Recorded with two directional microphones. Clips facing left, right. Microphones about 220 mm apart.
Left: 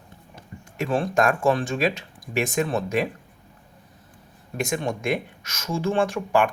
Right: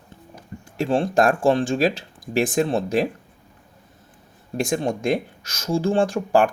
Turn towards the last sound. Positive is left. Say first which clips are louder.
# right 3 dB
turn(degrees=-35)  # may be behind; listen again after turning